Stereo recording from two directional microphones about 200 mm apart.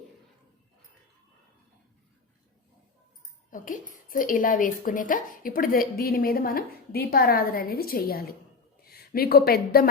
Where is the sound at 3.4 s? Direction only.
40° left (ahead or behind).